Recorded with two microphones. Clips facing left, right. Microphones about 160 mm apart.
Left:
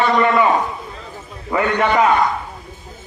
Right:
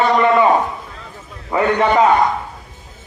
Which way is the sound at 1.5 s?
30° right (ahead or behind).